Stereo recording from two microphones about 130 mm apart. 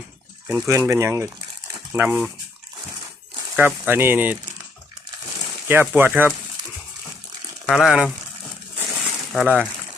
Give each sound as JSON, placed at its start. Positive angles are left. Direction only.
{"t": 0.7, "sound": "speech", "side_deg": -25}
{"t": 3.5, "sound": "speech", "side_deg": -10}
{"t": 5.6, "sound": "speech", "side_deg": -15}
{"t": 7.7, "sound": "speech", "side_deg": 0}
{"t": 9.0, "sound": "a sound", "side_deg": 0}